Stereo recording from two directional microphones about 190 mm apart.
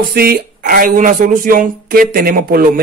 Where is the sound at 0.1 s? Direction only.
55° right (ahead or behind).